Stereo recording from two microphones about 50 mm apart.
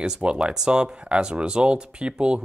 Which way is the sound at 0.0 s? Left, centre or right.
Centre.